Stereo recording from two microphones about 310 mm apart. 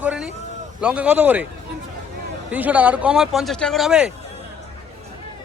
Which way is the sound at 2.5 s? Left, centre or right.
Centre.